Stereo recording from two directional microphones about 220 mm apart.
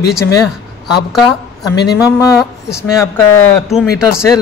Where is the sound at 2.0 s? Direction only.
15° left (ahead or behind).